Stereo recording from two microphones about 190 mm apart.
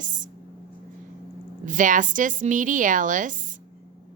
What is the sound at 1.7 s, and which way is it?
A woman's voice, 45° right (ahead or behind).